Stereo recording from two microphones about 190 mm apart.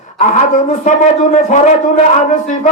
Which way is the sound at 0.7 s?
40° left (ahead or behind).